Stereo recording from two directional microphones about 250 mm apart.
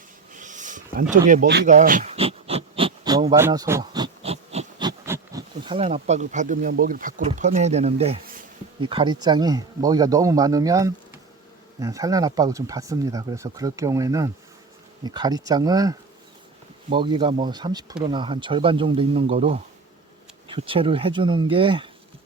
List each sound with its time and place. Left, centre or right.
0.3 s a sound: right
1.1 s speech: right
8.2 s bee: right
8.8 s speech: centre